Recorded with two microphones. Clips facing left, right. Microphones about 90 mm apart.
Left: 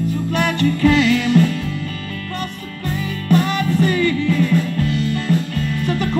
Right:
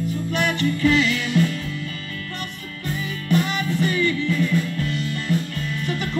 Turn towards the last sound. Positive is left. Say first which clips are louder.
# left 6 dB
turn(degrees=45)  # may be behind; listen again after turning